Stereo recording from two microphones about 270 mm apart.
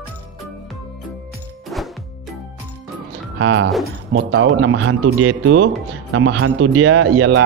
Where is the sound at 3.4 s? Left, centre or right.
Right.